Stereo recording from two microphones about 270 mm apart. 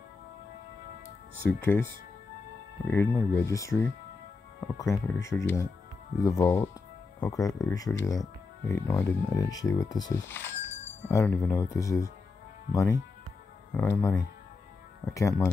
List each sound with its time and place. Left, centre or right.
1.6 s speech: centre
2.9 s speech: centre